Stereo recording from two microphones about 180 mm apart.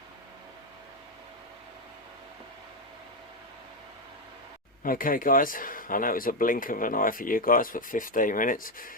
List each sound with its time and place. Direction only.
4.8 s speech: 50° left (ahead or behind)